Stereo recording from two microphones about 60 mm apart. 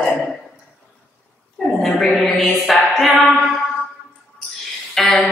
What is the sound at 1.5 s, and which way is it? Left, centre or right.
A woman's voice, centre.